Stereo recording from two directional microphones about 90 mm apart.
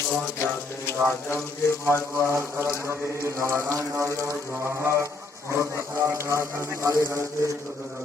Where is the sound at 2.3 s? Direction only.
30° right (ahead or behind).